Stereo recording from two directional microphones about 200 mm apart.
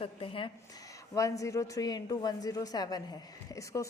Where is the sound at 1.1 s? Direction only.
15° left (ahead or behind).